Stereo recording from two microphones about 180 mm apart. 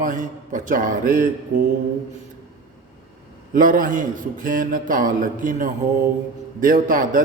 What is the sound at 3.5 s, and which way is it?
A man's voice, 50° right (ahead or behind).